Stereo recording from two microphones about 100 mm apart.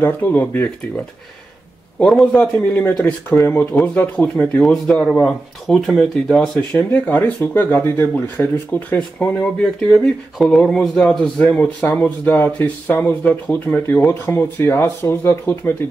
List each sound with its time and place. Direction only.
0.0 s speech: 15° left (ahead or behind)
2.3 s speech: 10° left (ahead or behind)
6.8 s speech: 15° left (ahead or behind)